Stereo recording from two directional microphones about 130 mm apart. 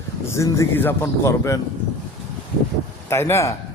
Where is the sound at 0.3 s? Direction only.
25° left (ahead or behind).